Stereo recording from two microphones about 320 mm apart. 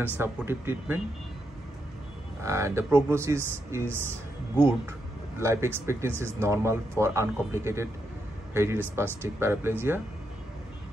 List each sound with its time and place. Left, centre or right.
0.0 s speech: centre
2.4 s speech: centre
5.4 s speech: centre